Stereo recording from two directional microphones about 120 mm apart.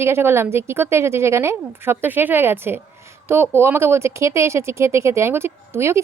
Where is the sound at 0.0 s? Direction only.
20° right (ahead or behind).